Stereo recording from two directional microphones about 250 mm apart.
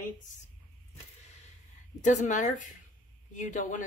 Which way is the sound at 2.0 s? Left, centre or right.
Left.